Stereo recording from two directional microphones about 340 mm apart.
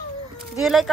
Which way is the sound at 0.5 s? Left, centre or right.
Centre.